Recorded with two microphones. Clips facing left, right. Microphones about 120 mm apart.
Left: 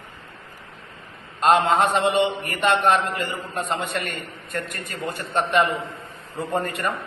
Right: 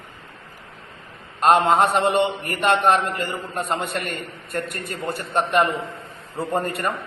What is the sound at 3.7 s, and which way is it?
A man's voice, 45° right (ahead or behind).